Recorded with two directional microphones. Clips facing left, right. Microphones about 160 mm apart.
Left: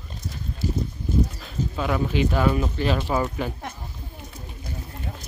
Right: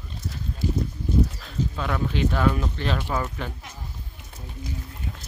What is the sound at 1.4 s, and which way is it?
Speech, 5° left (ahead or behind).